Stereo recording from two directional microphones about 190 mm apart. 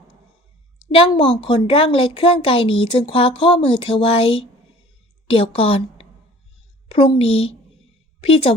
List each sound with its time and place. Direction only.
0.9 s a woman's voice: 25° left (ahead or behind)